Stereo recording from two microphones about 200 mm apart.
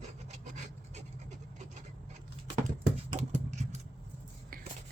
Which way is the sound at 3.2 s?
35° right (ahead or behind).